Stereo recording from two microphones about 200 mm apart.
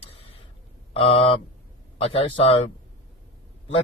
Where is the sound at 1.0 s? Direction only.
30° left (ahead or behind).